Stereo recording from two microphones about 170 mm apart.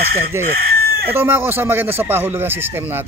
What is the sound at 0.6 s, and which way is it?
Chicken, 65° right (ahead or behind).